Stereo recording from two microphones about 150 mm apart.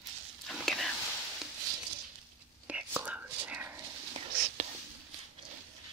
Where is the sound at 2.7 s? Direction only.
10° right (ahead or behind).